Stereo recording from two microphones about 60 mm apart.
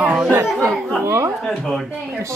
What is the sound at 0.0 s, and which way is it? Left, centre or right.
Chatter, centre.